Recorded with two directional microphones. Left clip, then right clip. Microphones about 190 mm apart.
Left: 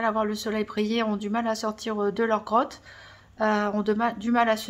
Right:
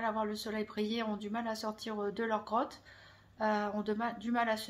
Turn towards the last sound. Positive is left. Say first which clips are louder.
# left 10 dB
turn(degrees=35)  # may be behind; listen again after turning